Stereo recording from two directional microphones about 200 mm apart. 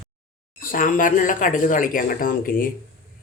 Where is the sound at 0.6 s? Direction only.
45° left (ahead or behind).